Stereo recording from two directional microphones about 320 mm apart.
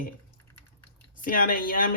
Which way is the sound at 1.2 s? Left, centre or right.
Left.